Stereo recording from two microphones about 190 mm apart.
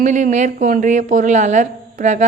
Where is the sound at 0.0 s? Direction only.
40° right (ahead or behind).